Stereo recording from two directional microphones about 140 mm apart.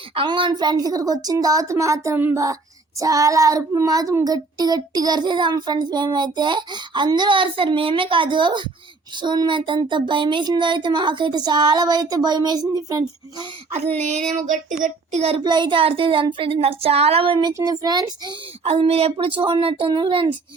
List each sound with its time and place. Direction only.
0.1 s a child's voice: 40° right (ahead or behind)
14.1 s child singing: 60° right (ahead or behind)
14.8 s speech: 50° right (ahead or behind)
15.4 s a child's voice: 35° right (ahead or behind)
17.5 s speech: 25° right (ahead or behind)
18.6 s a child's voice: 45° right (ahead or behind)